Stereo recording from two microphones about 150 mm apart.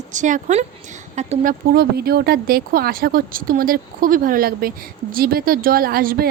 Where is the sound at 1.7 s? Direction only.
90° right.